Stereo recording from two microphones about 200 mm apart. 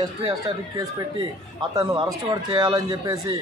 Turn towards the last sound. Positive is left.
turn(degrees=-20)  # may be behind; listen again after turning